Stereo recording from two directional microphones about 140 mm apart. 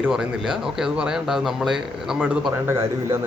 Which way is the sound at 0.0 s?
5° right (ahead or behind).